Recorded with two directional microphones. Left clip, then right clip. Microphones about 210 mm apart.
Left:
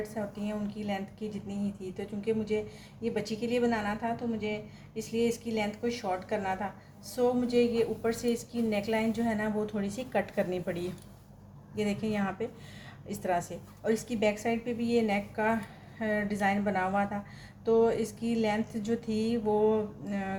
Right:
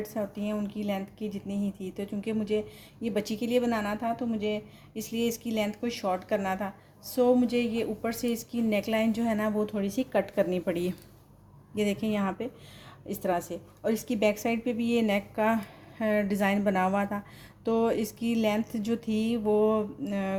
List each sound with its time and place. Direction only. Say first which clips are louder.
0.3 s a woman's voice: right 3 dB; 50° right (ahead or behind)